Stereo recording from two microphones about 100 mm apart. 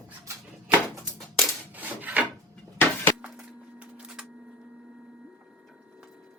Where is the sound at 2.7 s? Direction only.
20° left (ahead or behind).